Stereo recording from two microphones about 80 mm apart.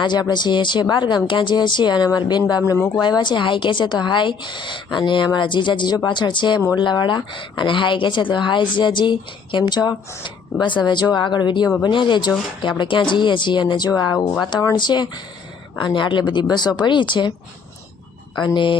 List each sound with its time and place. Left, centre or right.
0.0 s a woman's voice: left
3.0 s a woman's voice: left
11.8 s a woman's voice: left
14.8 s a woman's voice: left
16.8 s a woman's voice: left
18.3 s a woman's voice: left